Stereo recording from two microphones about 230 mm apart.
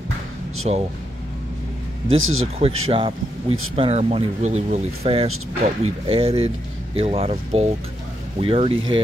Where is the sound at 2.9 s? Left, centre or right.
Right.